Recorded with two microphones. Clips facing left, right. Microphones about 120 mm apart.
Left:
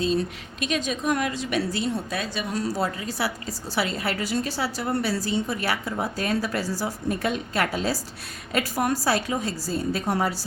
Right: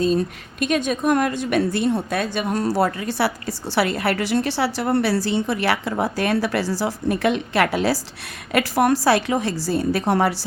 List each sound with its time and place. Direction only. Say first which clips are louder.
0.0 s a woman's voice: right 4 dB; 45° right (ahead or behind); by 10.4 s 70° right (ahead or behind)